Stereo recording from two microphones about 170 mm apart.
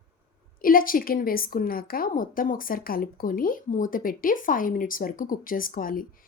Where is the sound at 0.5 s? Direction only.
55° left (ahead or behind).